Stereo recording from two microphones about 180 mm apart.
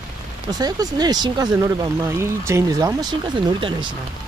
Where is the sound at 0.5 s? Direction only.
20° right (ahead or behind).